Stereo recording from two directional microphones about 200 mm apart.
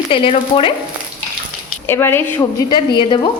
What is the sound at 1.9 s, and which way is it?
A woman's voice, 10° left (ahead or behind).